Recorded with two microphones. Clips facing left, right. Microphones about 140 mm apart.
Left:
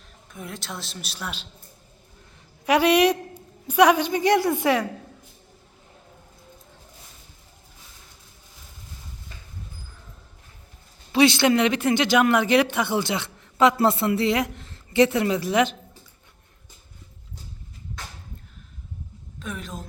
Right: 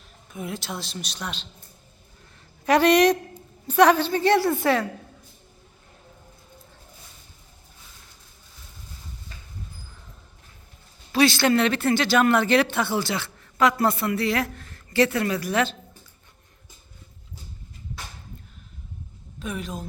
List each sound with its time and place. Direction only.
0.3 s a man's voice: 5° right (ahead or behind)
2.6 s a woman's voice: 10° left (ahead or behind)
11.1 s speech: 20° left (ahead or behind)
19.4 s a man's voice: centre (ahead or behind)